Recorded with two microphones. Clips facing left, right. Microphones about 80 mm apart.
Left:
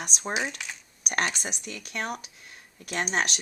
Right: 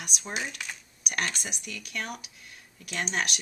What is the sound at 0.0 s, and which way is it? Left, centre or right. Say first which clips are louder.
Speech: left 5 dB; left.